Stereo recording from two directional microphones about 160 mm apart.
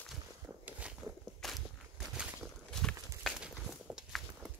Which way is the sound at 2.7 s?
5° left (ahead or behind).